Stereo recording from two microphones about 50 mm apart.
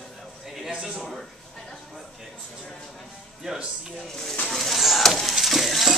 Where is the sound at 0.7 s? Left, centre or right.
Centre.